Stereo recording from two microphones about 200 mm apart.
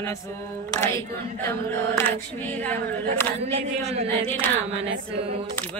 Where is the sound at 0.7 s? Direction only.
15° left (ahead or behind).